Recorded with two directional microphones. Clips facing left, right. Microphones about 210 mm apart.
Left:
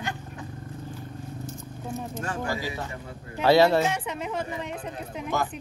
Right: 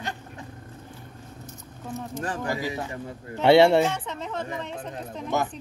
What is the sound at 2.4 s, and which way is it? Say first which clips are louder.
Speech: right 2 dB; 20° right (ahead or behind).